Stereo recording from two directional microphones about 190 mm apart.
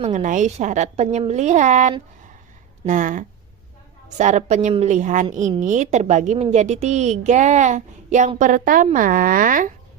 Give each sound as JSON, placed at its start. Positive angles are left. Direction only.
{"t": 0.0, "sound": "a woman's voice", "side_deg": -40}